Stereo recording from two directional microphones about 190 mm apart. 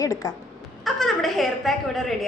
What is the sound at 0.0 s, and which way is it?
Speech, 20° left (ahead or behind).